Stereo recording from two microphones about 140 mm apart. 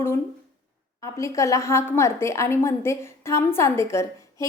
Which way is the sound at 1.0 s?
20° left (ahead or behind).